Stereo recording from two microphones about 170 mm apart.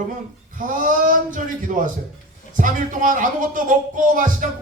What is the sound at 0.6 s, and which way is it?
A man's voice, 50° right (ahead or behind).